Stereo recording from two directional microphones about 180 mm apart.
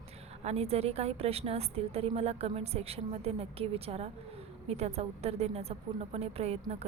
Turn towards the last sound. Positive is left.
turn(degrees=-35)  # may be behind; listen again after turning